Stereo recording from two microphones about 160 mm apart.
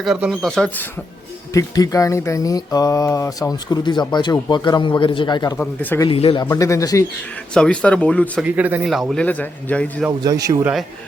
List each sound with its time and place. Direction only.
0.0 s speech: 5° right (ahead or behind)
1.5 s speech: 20° left (ahead or behind)
5.5 s speech: 10° left (ahead or behind)
6.1 s speech: 35° left (ahead or behind)
6.4 s speech: 20° left (ahead or behind)
7.5 s speech: 5° left (ahead or behind)
8.4 s speech: 10° right (ahead or behind); by 9.9 s 10° left (ahead or behind)
10.1 s a man's voice: 20° right (ahead or behind)